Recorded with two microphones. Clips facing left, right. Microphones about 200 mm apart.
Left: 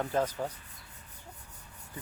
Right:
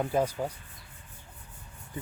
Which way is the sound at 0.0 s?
10° right (ahead or behind).